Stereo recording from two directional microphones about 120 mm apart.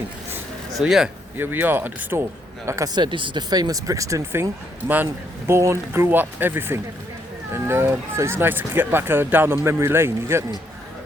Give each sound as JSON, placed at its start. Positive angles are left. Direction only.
{"t": 0.8, "sound": "speech", "side_deg": -5}
{"t": 1.4, "sound": "speech", "side_deg": -15}
{"t": 2.6, "sound": "speech", "side_deg": -30}
{"t": 5.5, "sound": "speech", "side_deg": -25}